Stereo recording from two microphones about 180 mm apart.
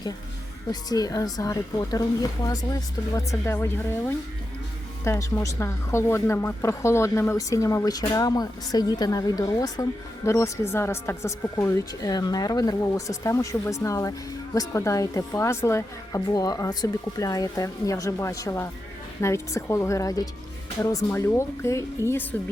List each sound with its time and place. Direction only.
0.7 s speech: 20° left (ahead or behind)